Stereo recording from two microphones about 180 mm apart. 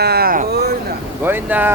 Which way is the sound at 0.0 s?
60° right (ahead or behind).